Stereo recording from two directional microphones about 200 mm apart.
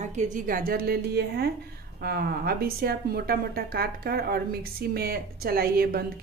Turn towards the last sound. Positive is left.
turn(degrees=-50)  # may be behind; listen again after turning